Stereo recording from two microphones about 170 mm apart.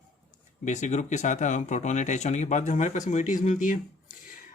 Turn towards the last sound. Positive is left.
turn(degrees=50)  # may be behind; listen again after turning